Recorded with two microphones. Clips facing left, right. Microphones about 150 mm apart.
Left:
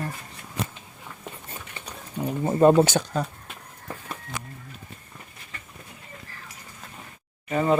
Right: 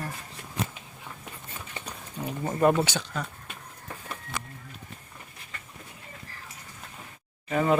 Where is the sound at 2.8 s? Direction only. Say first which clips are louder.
Left 8 dB; 45° left (ahead or behind).